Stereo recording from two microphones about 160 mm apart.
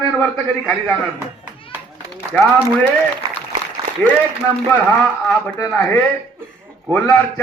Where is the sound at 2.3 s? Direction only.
10° left (ahead or behind).